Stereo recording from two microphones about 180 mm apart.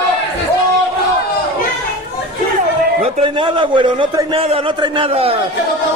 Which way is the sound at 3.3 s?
25° right (ahead or behind).